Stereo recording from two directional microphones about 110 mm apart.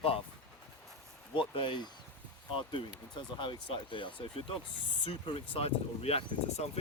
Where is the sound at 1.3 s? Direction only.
50° left (ahead or behind).